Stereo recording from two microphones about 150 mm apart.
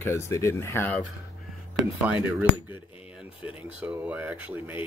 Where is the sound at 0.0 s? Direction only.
20° left (ahead or behind).